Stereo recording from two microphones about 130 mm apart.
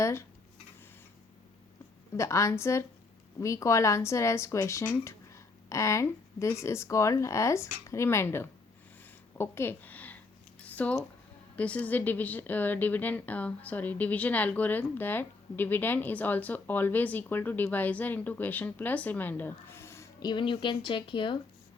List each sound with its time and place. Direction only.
0.0 s speech: 20° left (ahead or behind)
2.1 s a woman's voice: 25° left (ahead or behind)
20.2 s speech: 40° left (ahead or behind)